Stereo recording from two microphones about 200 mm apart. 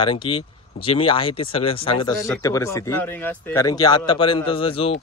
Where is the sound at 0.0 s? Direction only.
25° left (ahead or behind).